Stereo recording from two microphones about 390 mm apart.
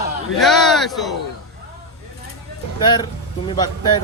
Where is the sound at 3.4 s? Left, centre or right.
Centre.